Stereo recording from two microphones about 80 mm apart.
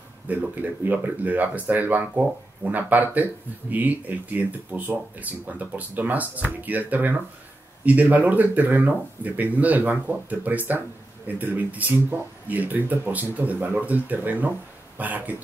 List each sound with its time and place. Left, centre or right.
0.3 s speech: right